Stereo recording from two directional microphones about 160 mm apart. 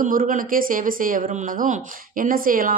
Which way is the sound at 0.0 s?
60° right (ahead or behind).